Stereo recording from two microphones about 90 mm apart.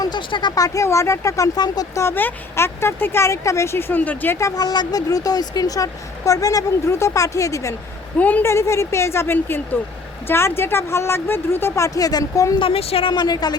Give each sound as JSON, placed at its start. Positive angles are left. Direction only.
{"t": 0.0, "sound": "speech", "side_deg": 60}
{"t": 0.5, "sound": "speech", "side_deg": 40}
{"t": 1.5, "sound": "a woman's voice", "side_deg": 50}
{"t": 2.0, "sound": "speech", "side_deg": 25}
{"t": 4.4, "sound": "speech", "side_deg": 40}
{"t": 8.2, "sound": "a woman's voice", "side_deg": 15}
{"t": 8.4, "sound": "speech", "side_deg": 30}
{"t": 12.5, "sound": "a woman's voice", "side_deg": 90}
{"t": 13.1, "sound": "a woman's voice", "side_deg": 50}